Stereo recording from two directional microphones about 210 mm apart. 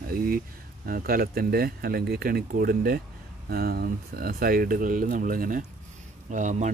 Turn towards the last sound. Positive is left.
turn(degrees=-35)  # may be behind; listen again after turning